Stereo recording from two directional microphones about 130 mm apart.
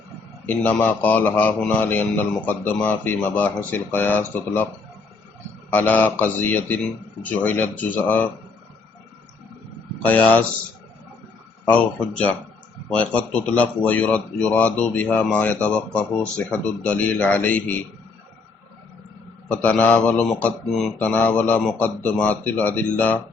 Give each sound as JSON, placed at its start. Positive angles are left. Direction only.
{"t": 0.4, "sound": "speech", "side_deg": 10}
{"t": 5.7, "sound": "speech", "side_deg": 10}
{"t": 10.0, "sound": "speech", "side_deg": 10}
{"t": 11.6, "sound": "speech", "side_deg": 10}
{"t": 19.5, "sound": "speech", "side_deg": 10}